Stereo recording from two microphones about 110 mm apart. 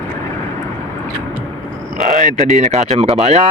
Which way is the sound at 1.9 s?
90° right.